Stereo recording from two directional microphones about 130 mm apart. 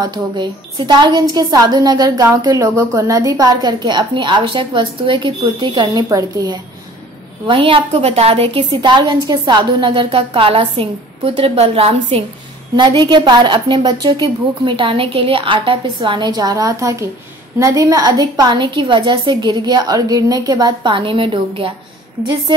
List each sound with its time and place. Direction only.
0.0 s a woman's voice: 35° right (ahead or behind)
6.0 s a woman's voice: 25° right (ahead or behind)
7.4 s a woman's voice: 40° right (ahead or behind)
8.8 s a woman's voice: 35° right (ahead or behind)
12.7 s a woman's voice: 35° right (ahead or behind)